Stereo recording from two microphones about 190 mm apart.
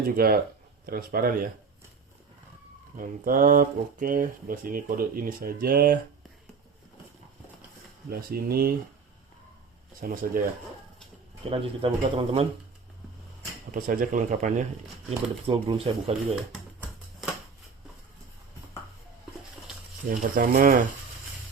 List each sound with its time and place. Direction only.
0.2 s speech: 50° right (ahead or behind)
3.0 s speech: 45° right (ahead or behind)
8.1 s speech: 55° right (ahead or behind)
10.0 s speech: 45° right (ahead or behind)
11.4 s speech: 30° right (ahead or behind)
13.7 s speech: 45° right (ahead or behind)
15.4 s speech: 30° right (ahead or behind)
16.3 s a sound: 5° right (ahead or behind)
20.1 s speech: 45° right (ahead or behind)